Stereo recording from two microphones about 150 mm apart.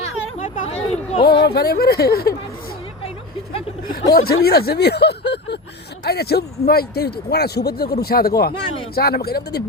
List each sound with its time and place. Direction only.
0.0 s a sound: 50° left (ahead or behind)
1.2 s speech: 90° left
4.1 s speech: 90° left